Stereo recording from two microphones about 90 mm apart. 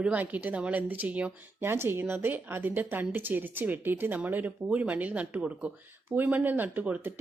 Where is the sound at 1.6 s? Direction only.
25° right (ahead or behind).